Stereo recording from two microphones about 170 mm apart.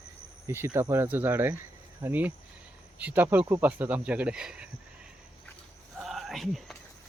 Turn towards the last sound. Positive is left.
turn(degrees=0)  # may be behind; listen again after turning